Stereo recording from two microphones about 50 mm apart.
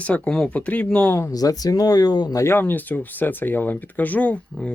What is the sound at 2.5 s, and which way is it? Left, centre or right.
Speech, left.